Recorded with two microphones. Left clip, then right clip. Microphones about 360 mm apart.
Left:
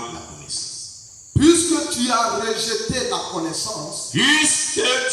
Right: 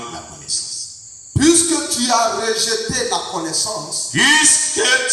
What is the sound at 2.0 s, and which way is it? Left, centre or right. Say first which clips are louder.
Music: right 5 dB; centre.